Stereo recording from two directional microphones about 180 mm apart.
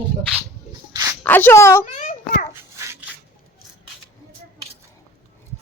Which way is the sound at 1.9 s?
40° left (ahead or behind).